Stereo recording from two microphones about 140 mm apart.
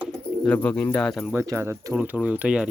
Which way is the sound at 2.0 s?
10° right (ahead or behind).